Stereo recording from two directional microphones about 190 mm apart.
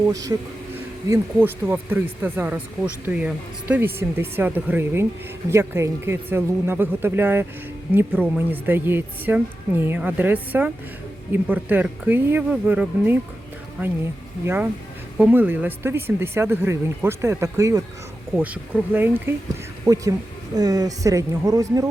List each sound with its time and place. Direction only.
0.1 s speech: 20° right (ahead or behind)
14.4 s speech: 10° right (ahead or behind)